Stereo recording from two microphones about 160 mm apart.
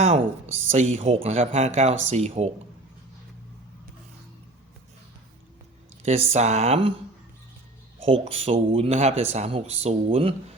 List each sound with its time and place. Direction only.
0.7 s speech: 45° right (ahead or behind)
6.1 s speech: 40° right (ahead or behind)
8.0 s speech: 40° right (ahead or behind)